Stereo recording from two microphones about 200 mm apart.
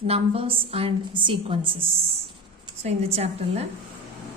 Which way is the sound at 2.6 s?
30° right (ahead or behind).